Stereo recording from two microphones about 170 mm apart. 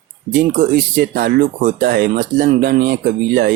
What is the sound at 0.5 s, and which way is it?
Speech, 55° right (ahead or behind).